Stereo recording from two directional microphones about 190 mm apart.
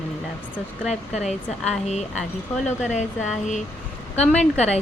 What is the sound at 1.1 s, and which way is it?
Speech, 35° left (ahead or behind).